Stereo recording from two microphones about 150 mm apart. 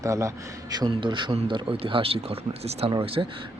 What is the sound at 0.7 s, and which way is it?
A man's voice, 35° right (ahead or behind).